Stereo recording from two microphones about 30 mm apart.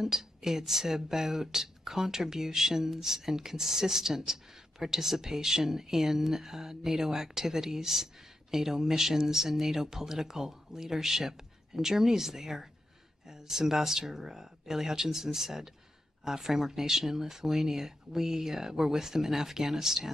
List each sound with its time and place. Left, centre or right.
0.0 s speech: centre